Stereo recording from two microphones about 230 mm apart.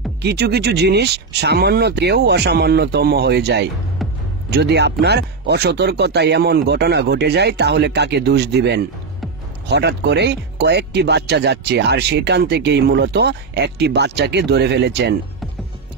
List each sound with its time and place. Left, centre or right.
0.2 s speech: right
4.0 s music: centre
4.5 s speech: right